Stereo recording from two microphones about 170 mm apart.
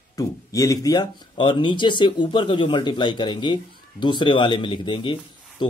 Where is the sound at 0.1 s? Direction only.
20° left (ahead or behind).